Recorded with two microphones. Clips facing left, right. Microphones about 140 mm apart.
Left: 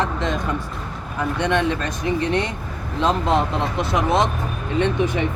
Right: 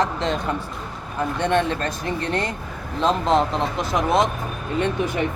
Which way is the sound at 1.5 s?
35° right (ahead or behind).